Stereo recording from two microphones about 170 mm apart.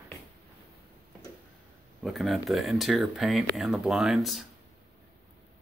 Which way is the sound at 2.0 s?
Centre (ahead or behind).